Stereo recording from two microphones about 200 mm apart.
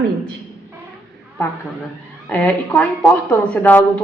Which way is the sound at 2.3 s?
10° left (ahead or behind).